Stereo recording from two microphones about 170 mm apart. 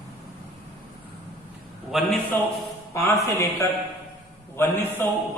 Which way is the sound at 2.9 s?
15° left (ahead or behind).